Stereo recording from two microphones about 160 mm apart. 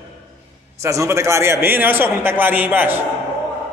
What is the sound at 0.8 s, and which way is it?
A man's voice, 20° right (ahead or behind).